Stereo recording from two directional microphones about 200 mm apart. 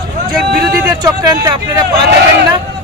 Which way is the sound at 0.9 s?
20° right (ahead or behind).